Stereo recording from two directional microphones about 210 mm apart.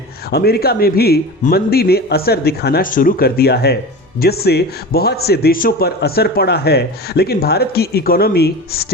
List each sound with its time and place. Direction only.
0.3 s a man's voice: 50° left (ahead or behind)